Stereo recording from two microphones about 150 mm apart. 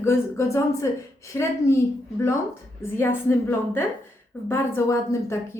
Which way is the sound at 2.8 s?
15° left (ahead or behind).